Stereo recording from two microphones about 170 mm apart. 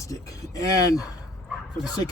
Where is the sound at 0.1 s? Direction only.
20° left (ahead or behind).